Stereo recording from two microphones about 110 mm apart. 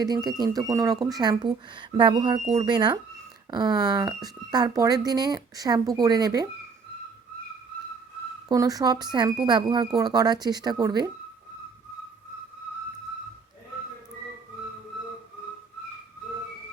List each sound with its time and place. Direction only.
0.0 s speech: 40° right (ahead or behind)
8.4 s speech: 35° right (ahead or behind)